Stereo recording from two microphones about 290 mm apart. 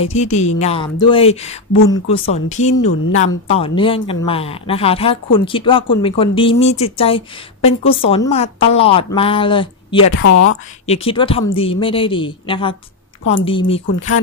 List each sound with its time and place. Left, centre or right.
0.0 s a woman's voice: left
10.1 s a woman's voice: left
10.9 s a woman's voice: centre